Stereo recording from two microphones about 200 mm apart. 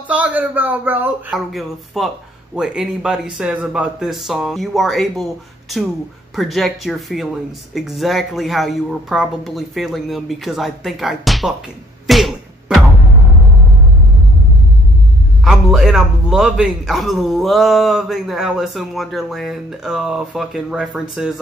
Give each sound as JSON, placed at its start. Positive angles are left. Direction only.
{"t": 0.1, "sound": "a man's voice", "side_deg": -5}
{"t": 6.3, "sound": "a man's voice", "side_deg": 0}
{"t": 12.1, "sound": "a sound", "side_deg": 0}
{"t": 15.4, "sound": "a man's voice", "side_deg": -5}